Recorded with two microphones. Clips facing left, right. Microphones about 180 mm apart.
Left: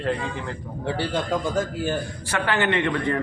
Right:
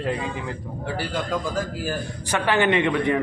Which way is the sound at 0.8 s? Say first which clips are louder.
Left 2 dB; 25° left (ahead or behind).